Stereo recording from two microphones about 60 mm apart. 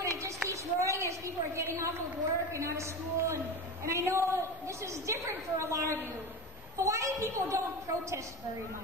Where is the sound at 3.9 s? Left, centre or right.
Right.